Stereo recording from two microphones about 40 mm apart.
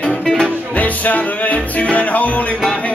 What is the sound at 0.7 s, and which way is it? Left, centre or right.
Music, left.